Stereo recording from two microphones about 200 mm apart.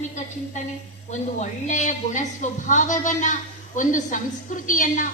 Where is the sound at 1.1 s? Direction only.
40° left (ahead or behind).